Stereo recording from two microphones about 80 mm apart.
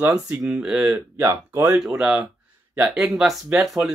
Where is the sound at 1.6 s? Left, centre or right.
Centre.